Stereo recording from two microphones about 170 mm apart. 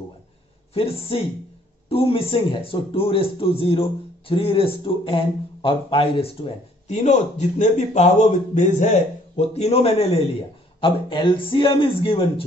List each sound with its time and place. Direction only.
0.7 s a man's voice: 35° left (ahead or behind)